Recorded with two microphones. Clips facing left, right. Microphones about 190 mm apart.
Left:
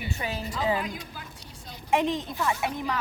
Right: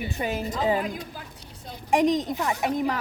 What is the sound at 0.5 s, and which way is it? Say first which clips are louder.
Speech: right 2 dB; 35° right (ahead or behind).